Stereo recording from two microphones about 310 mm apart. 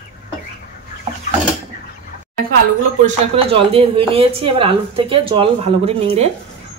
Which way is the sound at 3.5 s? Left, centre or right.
Centre.